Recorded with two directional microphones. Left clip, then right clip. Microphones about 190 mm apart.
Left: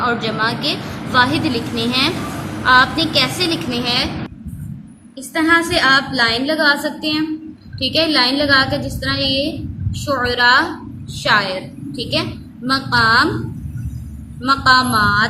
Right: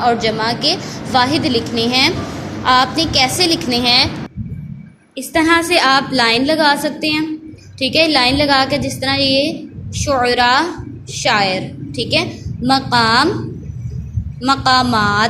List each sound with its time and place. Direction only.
0.0 s a woman's voice: 20° right (ahead or behind)
5.1 s a woman's voice: 30° right (ahead or behind)
14.4 s a woman's voice: 20° right (ahead or behind)